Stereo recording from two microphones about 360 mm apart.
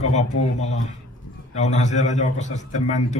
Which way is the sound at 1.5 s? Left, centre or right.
Centre.